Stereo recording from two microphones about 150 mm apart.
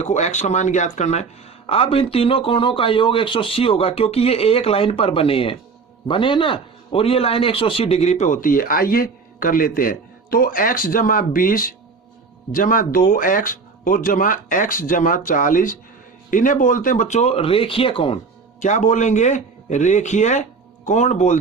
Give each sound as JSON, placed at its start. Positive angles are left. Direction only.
{"t": 0.0, "sound": "a man's voice", "side_deg": 50}
{"t": 18.6, "sound": "speech", "side_deg": 55}